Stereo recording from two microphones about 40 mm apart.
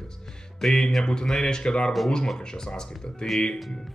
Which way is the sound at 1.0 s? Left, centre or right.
Centre.